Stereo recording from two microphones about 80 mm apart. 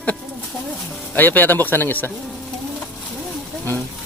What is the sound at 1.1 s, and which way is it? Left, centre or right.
Speech, left.